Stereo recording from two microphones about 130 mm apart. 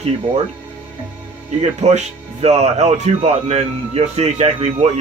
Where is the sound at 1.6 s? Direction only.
60° right (ahead or behind).